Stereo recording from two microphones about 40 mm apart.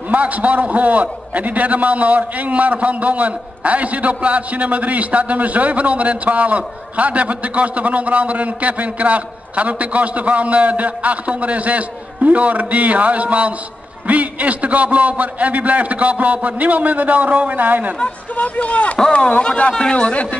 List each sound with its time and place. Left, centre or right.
0.1 s a man's voice: right
18.3 s speech: left